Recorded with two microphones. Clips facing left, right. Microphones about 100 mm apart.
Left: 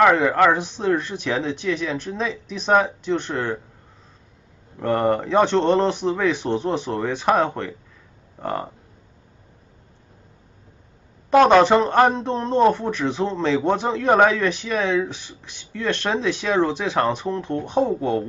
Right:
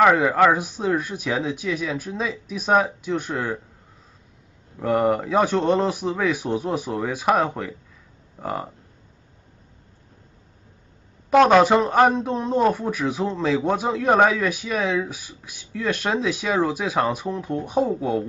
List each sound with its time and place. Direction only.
0.0 s speech: 5° right (ahead or behind)
4.7 s a man's voice: 5° right (ahead or behind)
11.2 s a man's voice: 5° right (ahead or behind)